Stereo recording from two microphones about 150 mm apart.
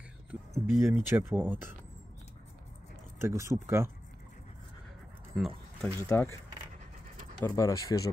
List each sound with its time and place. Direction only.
0.3 s speech: 15° right (ahead or behind)
3.2 s speech: 20° right (ahead or behind)
5.3 s speech: 5° right (ahead or behind)
5.8 s speech: 15° left (ahead or behind)
7.4 s speech: 20° left (ahead or behind)